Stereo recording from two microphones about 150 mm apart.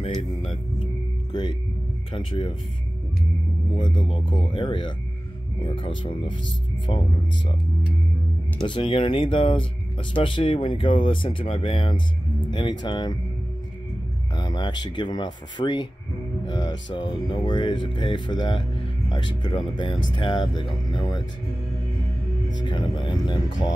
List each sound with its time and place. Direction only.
1.3 s speech: 30° left (ahead or behind)
3.7 s speech: 35° left (ahead or behind)
8.6 s speech: 35° left (ahead or behind)
14.3 s speech: 30° left (ahead or behind)
22.6 s speech: 30° left (ahead or behind)